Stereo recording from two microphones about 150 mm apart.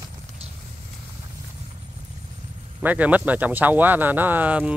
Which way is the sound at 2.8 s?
10° right (ahead or behind).